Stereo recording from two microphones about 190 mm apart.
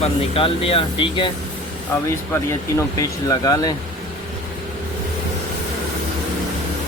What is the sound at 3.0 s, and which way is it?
Speech, 20° left (ahead or behind).